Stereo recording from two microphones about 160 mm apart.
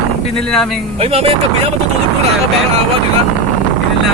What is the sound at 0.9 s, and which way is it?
Speech, 35° right (ahead or behind).